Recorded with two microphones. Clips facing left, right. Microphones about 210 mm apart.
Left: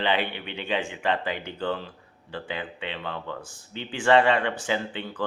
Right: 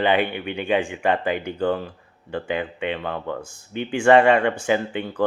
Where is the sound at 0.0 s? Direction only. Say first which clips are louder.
Right 6 dB; 50° right (ahead or behind).